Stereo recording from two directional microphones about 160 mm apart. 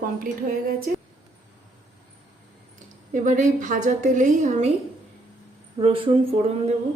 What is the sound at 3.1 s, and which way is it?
A woman's voice, 55° right (ahead or behind).